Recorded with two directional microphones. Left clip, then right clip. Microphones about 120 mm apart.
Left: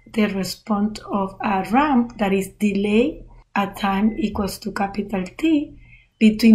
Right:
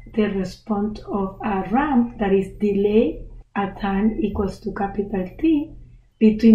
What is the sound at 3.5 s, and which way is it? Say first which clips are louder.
A woman's voice: left 3 dB; 20° left (ahead or behind).